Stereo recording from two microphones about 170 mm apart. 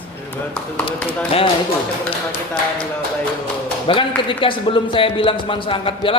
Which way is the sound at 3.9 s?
30° left (ahead or behind).